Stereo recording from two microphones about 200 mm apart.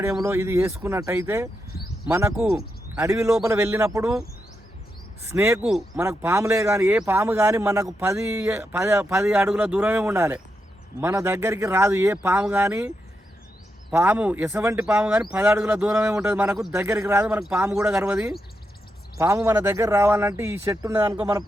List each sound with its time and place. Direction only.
0.2 s speech: 15° right (ahead or behind)
2.3 s speech: centre (ahead or behind)
2.6 s speech: 15° right (ahead or behind)
5.2 s speech: 10° right (ahead or behind)
13.9 s speech: 10° right (ahead or behind)
19.2 s a man's voice: 15° right (ahead or behind)